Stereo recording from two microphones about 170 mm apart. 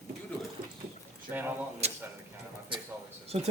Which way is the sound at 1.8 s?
40° right (ahead or behind).